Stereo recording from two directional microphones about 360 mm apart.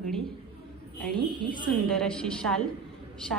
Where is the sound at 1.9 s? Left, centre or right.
Centre.